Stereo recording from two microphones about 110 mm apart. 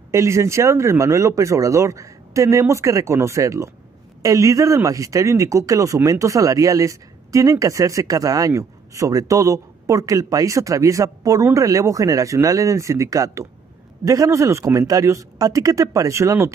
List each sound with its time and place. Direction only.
0.1 s speech: 25° right (ahead or behind)